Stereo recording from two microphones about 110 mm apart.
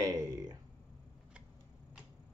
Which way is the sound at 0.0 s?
30° right (ahead or behind).